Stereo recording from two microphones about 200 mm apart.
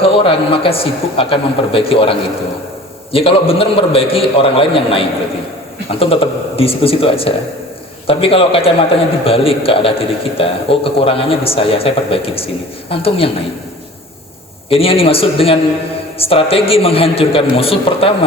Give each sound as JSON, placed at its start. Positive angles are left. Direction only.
{"t": 0.0, "sound": "a man's voice", "side_deg": 25}
{"t": 14.7, "sound": "a man's voice", "side_deg": 30}